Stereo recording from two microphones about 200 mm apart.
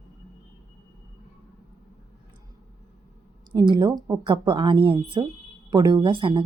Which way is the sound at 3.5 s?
20° right (ahead or behind).